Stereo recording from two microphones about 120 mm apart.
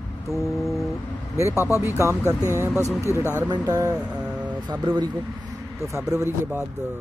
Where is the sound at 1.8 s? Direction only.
25° right (ahead or behind).